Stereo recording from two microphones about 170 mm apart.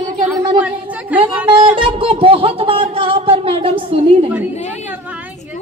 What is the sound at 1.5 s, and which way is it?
Speech, 30° right (ahead or behind).